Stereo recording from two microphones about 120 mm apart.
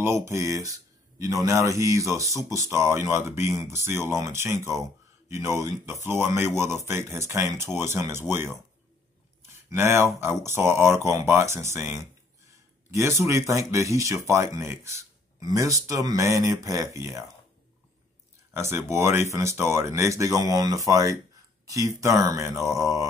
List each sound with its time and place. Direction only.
0.0 s a man's voice: 20° right (ahead or behind)
9.7 s a man's voice: 20° right (ahead or behind)
13.2 s a man's voice: 25° right (ahead or behind)
18.5 s a man's voice: 20° right (ahead or behind)